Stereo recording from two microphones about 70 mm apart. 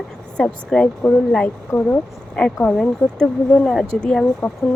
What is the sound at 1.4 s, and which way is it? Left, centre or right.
Speech, left.